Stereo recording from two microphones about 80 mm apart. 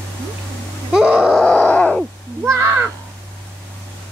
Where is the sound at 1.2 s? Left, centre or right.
Centre.